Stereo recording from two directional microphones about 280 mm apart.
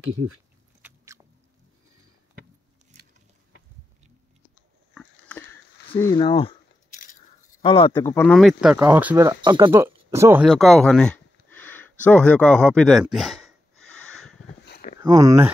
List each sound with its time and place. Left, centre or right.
0.0 s speech: right
0.8 s a sound: centre
4.9 s sniff: centre
5.9 s speech: centre
14.6 s a sound: left
15.0 s speech: centre